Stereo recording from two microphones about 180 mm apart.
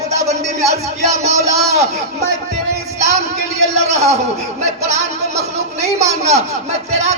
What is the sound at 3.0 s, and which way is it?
Music, 40° right (ahead or behind).